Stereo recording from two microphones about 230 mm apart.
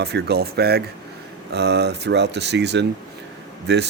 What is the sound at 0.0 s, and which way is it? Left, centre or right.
A man's voice, right.